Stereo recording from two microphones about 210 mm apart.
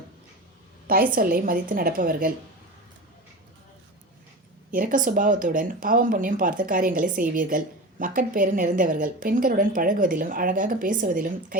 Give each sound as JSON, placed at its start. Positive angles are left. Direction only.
{"t": 0.9, "sound": "a woman's voice", "side_deg": -45}
{"t": 4.7, "sound": "speech", "side_deg": -40}